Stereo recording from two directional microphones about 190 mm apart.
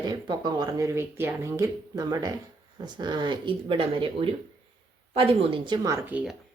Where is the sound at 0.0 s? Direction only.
20° right (ahead or behind).